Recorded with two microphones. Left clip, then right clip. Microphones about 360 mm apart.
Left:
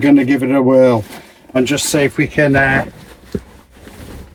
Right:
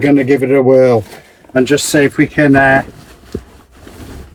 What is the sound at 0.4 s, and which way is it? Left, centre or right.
Speech, centre.